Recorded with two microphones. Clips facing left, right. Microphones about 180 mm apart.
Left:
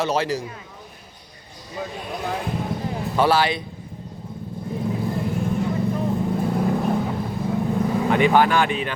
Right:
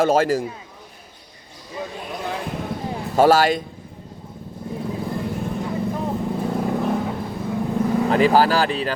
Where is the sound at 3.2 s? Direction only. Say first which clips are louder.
Right 4 dB; 45° right (ahead or behind).